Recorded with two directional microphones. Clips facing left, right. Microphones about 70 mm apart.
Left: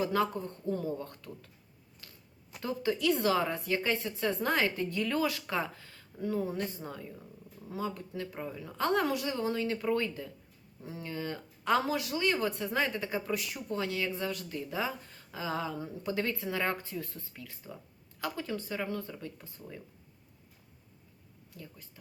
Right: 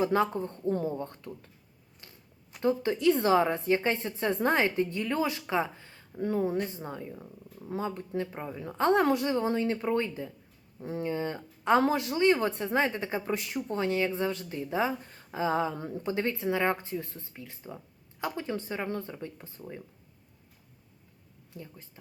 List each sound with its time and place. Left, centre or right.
0.0 s speech: right
2.0 s a sound: right
2.6 s speech: right
6.1 s speech: right
21.5 s speech: right